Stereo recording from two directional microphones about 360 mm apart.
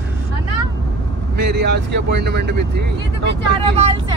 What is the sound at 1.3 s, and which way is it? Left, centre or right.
Speech, right.